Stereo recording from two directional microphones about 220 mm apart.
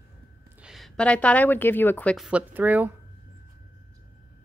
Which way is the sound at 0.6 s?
Centre (ahead or behind).